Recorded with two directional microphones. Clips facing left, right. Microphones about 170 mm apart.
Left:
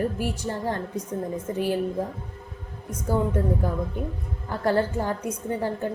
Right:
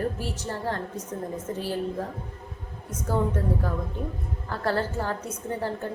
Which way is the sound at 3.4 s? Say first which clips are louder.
Left 3 dB; 15° left (ahead or behind).